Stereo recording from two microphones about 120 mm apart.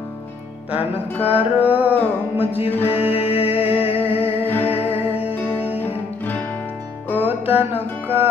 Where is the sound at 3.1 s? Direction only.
55° left (ahead or behind).